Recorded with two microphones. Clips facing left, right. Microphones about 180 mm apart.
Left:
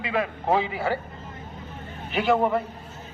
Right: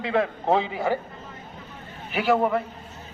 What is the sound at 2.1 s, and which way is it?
Speech, 5° right (ahead or behind).